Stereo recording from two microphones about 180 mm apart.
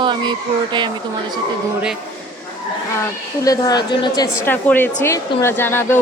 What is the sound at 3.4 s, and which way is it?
Speech, 20° left (ahead or behind).